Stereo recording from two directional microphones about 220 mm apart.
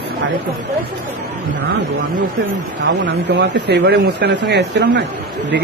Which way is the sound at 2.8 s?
55° right (ahead or behind).